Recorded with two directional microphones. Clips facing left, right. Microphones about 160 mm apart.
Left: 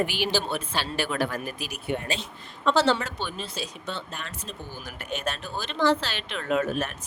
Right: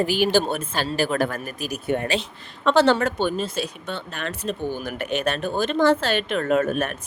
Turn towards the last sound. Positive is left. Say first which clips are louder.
# right 5 dB
turn(degrees=-55)  # may be behind; listen again after turning